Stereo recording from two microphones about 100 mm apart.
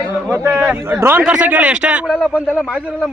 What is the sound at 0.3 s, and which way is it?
Speech, 25° right (ahead or behind).